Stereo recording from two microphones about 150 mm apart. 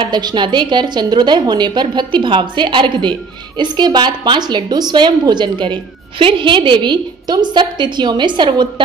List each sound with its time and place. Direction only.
0.0 s a woman's voice: 30° right (ahead or behind)